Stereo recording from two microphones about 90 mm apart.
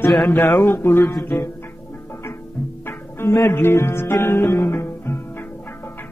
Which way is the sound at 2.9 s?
25° left (ahead or behind).